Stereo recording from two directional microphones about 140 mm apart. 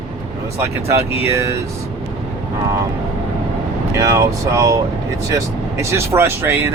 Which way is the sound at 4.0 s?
20° right (ahead or behind).